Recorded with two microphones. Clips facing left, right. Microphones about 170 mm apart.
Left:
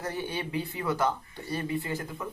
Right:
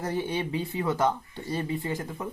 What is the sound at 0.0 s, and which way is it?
Speech, 25° right (ahead or behind).